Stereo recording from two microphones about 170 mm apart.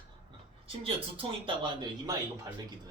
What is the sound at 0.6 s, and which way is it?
Speech, 30° right (ahead or behind).